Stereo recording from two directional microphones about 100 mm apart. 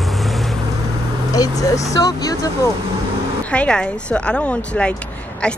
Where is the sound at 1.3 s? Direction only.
35° left (ahead or behind).